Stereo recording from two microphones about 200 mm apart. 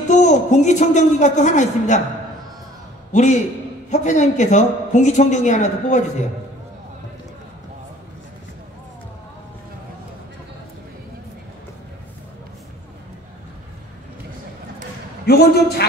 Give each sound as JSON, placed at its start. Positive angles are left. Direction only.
{"t": 0.1, "sound": "a woman's voice", "side_deg": 35}
{"t": 3.1, "sound": "a man's voice", "side_deg": 35}
{"t": 15.2, "sound": "a man's voice", "side_deg": 50}